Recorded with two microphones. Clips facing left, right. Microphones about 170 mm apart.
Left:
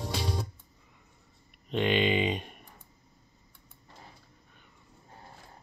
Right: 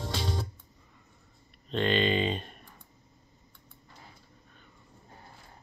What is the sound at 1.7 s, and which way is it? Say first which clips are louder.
Speech: even; 15° left (ahead or behind).